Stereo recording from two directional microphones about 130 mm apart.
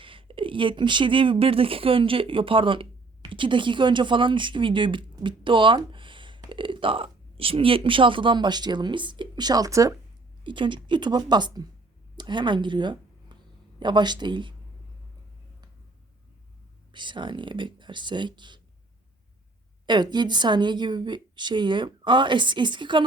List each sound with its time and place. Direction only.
0.0 s speech: 40° right (ahead or behind); by 9.9 s 25° right (ahead or behind)
10.4 s a woman's voice: 40° right (ahead or behind)
16.9 s a woman's voice: 35° right (ahead or behind)
19.8 s a woman's voice: 35° right (ahead or behind)